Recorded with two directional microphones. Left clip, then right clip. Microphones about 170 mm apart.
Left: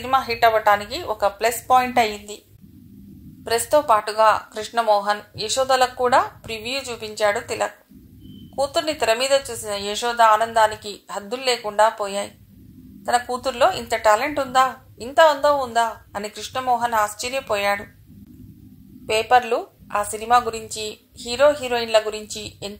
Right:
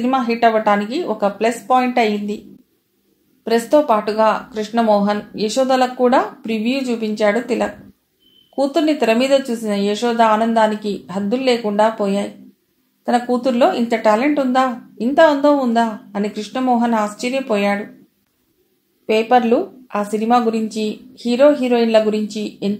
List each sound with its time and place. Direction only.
0.0 s a woman's voice: 35° left (ahead or behind)
3.4 s a woman's voice: 35° left (ahead or behind)
19.0 s a woman's voice: 35° left (ahead or behind)